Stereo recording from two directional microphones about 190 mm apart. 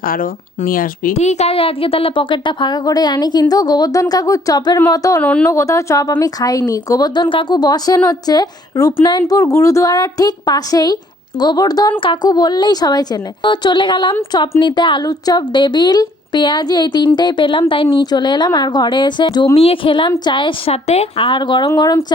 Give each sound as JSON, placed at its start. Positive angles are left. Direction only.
{"t": 0.0, "sound": "speech", "side_deg": 50}
{"t": 1.1, "sound": "speech", "side_deg": 35}
{"t": 5.2, "sound": "speech", "side_deg": 5}